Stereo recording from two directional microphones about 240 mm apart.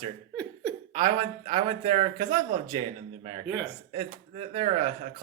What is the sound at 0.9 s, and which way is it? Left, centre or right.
Speech, centre.